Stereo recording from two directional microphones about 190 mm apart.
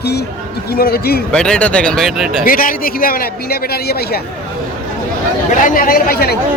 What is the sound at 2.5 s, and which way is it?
A man's voice, 45° left (ahead or behind).